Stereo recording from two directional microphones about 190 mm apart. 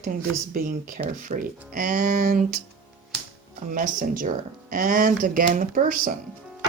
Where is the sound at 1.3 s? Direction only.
35° right (ahead or behind).